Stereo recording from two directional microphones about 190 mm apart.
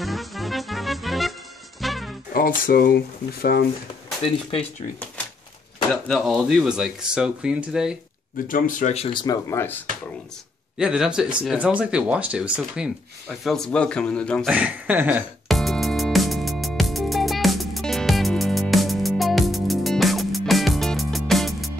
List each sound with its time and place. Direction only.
0.0 s music: centre (ahead or behind)
2.3 s speech: 50° left (ahead or behind)
6.0 s speech: centre (ahead or behind)
8.5 s speech: 45° left (ahead or behind); by 9.8 s 10° left (ahead or behind)
10.8 s speech: 5° right (ahead or behind)
14.5 s music: 5° right (ahead or behind)